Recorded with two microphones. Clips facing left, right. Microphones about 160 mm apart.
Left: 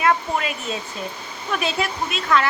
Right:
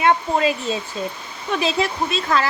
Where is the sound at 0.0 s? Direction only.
25° right (ahead or behind).